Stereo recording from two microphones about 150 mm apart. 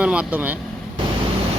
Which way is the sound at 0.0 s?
10° right (ahead or behind).